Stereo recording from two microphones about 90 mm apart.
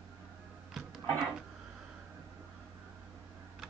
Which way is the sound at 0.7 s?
Centre (ahead or behind).